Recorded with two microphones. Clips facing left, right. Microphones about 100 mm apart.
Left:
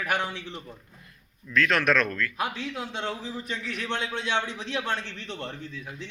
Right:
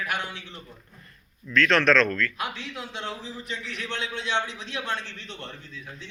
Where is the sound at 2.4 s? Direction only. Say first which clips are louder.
Left 3 dB; 45° left (ahead or behind).